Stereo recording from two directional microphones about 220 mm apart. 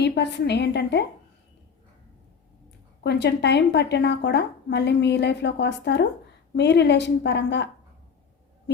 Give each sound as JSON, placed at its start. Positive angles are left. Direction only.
{"t": 0.0, "sound": "speech", "side_deg": 50}
{"t": 3.0, "sound": "speech", "side_deg": 50}